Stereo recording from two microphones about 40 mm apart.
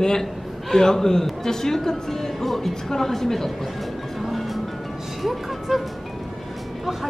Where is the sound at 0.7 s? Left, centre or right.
Centre.